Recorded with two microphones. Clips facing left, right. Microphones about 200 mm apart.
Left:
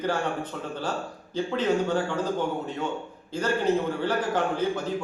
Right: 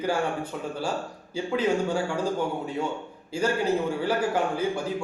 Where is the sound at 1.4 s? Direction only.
10° right (ahead or behind).